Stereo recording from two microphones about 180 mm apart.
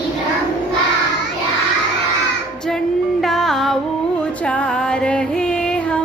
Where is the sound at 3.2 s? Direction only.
Centre (ahead or behind).